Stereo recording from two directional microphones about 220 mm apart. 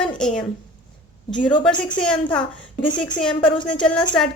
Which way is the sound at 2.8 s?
20° left (ahead or behind).